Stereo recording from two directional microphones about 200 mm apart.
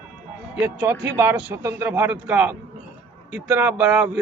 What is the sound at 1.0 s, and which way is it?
A man's voice, 10° right (ahead or behind).